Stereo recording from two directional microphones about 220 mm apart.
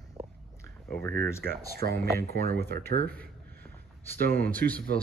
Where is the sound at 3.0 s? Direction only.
5° left (ahead or behind).